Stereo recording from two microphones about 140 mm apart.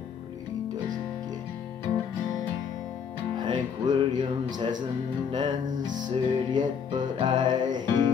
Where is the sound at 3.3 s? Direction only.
30° right (ahead or behind).